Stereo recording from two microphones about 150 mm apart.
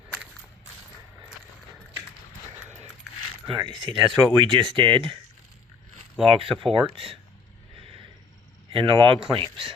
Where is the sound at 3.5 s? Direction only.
30° right (ahead or behind).